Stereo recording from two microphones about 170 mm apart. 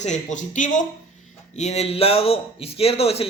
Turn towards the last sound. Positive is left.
turn(degrees=35)  # may be behind; listen again after turning